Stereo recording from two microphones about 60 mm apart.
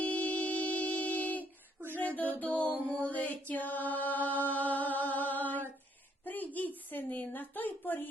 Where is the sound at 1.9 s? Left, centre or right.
Left.